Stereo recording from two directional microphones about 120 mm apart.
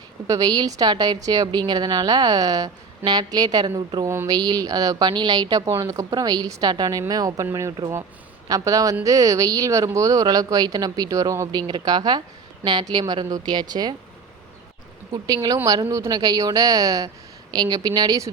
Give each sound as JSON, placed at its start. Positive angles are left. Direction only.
{"t": 0.3, "sound": "a woman's voice", "side_deg": -30}
{"t": 8.4, "sound": "speech", "side_deg": -30}
{"t": 11.6, "sound": "a woman's voice", "side_deg": -35}
{"t": 15.1, "sound": "a woman's voice", "side_deg": -35}